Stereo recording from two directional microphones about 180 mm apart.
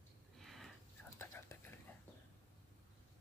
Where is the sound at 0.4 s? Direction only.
Centre (ahead or behind).